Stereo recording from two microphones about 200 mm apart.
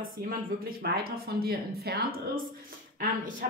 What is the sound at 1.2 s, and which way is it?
A woman's voice, 50° right (ahead or behind).